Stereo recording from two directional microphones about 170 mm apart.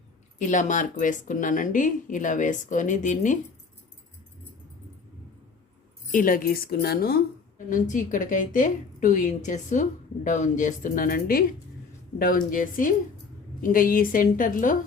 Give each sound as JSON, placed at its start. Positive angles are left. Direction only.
{"t": 0.3, "sound": "speech", "side_deg": 50}
{"t": 6.1, "sound": "a woman's voice", "side_deg": 50}
{"t": 7.7, "sound": "a woman's voice", "side_deg": 50}